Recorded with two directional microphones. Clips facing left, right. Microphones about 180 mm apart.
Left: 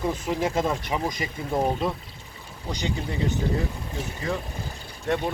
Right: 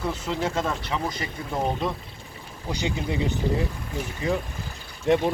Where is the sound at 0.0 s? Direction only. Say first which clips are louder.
Left 2 dB; 15° left (ahead or behind).